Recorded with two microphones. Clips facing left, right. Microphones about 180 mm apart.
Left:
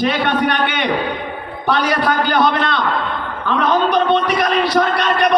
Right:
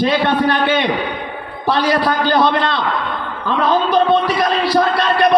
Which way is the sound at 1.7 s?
35° right (ahead or behind).